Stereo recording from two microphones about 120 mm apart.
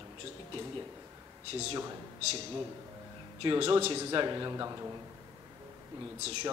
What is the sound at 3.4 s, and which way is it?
A man's voice, 45° right (ahead or behind).